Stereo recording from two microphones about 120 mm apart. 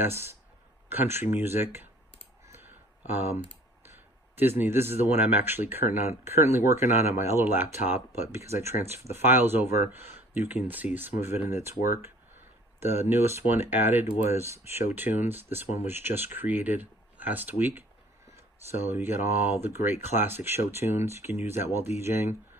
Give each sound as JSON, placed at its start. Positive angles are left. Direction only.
{"t": 0.0, "sound": "speech", "side_deg": -20}
{"t": 2.4, "sound": "clicking", "side_deg": -20}
{"t": 4.4, "sound": "speech", "side_deg": -20}
{"t": 12.8, "sound": "speech", "side_deg": -20}
{"t": 18.9, "sound": "speech", "side_deg": -20}